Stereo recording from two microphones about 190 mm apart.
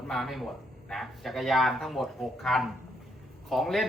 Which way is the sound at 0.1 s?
Centre (ahead or behind).